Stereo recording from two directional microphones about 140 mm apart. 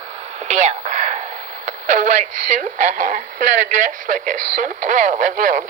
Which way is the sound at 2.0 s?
65° right (ahead or behind).